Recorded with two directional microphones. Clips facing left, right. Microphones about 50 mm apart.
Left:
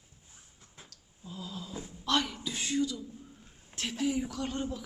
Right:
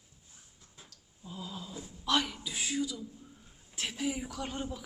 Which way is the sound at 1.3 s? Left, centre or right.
Centre.